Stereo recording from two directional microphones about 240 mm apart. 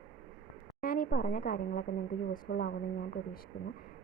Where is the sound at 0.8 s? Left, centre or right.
Left.